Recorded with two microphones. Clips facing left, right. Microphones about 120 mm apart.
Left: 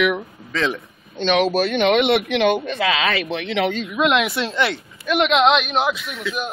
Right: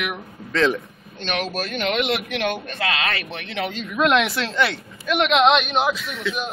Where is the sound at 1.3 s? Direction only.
Centre (ahead or behind).